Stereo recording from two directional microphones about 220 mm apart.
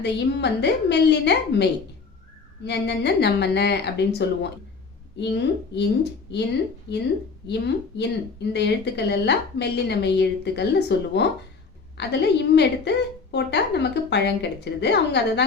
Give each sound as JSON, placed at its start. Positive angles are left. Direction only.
{"t": 0.0, "sound": "speech", "side_deg": 50}